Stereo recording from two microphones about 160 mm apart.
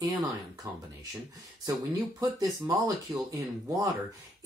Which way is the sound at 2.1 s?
20° right (ahead or behind).